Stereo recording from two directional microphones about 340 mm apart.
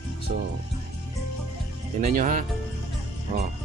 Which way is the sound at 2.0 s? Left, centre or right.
Right.